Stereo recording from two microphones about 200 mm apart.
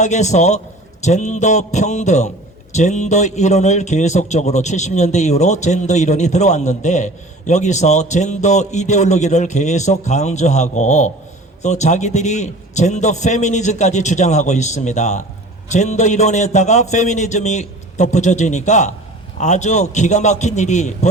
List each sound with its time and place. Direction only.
0.0 s a man's voice: 35° left (ahead or behind)